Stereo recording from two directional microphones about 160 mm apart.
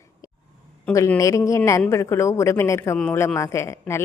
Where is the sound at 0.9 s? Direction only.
20° left (ahead or behind).